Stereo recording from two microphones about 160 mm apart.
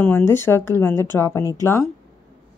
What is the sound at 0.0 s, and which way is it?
A woman's voice, 15° left (ahead or behind).